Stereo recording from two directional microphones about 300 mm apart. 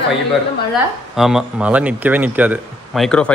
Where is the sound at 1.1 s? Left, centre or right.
Centre.